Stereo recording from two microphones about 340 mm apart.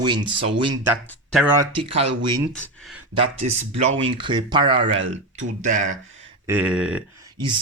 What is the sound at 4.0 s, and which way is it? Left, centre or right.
Speech, centre.